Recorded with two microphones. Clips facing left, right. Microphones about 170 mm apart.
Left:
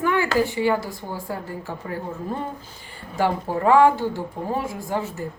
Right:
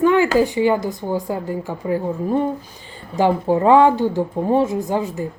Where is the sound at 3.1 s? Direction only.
20° right (ahead or behind).